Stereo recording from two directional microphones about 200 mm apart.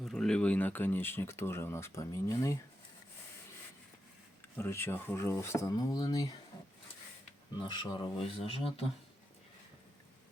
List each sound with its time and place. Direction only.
0.0 s speech: 5° left (ahead or behind)
4.5 s speech: 10° left (ahead or behind)
7.5 s speech: 20° left (ahead or behind)